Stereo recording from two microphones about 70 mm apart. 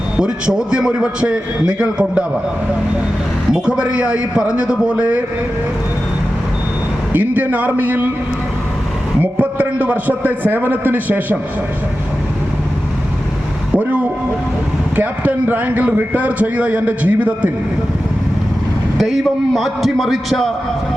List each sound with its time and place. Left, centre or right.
0.2 s a man's voice: centre
3.5 s a man's voice: centre
7.1 s a man's voice: right
9.2 s a man's voice: right
14.9 s a man's voice: right
18.9 s a man's voice: centre